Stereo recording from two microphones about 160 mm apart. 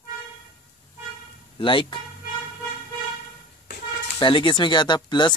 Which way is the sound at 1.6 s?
30° left (ahead or behind).